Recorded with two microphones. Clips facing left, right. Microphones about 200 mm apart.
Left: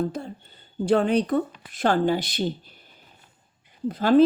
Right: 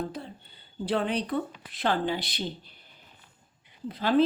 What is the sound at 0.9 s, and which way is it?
Speech, 45° left (ahead or behind).